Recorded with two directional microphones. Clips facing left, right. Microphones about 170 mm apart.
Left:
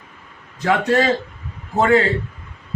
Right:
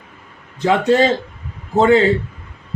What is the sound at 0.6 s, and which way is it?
Speech, 25° right (ahead or behind).